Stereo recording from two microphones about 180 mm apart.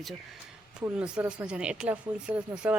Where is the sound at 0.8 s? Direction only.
5° right (ahead or behind).